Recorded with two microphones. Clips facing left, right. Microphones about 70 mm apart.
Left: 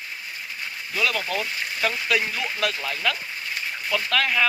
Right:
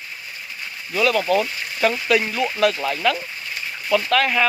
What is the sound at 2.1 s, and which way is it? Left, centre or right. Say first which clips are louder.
Speech: right 5 dB; centre.